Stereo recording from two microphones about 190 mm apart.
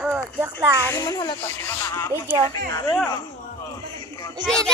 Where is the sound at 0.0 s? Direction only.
5° right (ahead or behind).